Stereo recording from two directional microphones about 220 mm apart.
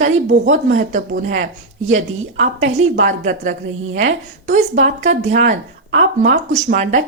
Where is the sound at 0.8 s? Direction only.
35° right (ahead or behind).